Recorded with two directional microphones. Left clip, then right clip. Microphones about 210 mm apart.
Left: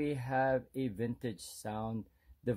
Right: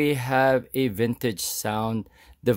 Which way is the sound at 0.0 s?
40° right (ahead or behind).